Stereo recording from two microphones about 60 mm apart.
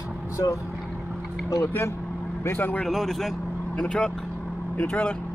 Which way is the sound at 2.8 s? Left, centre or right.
Centre.